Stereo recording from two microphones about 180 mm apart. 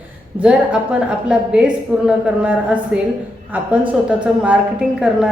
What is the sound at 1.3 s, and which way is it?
A woman's voice, 5° right (ahead or behind).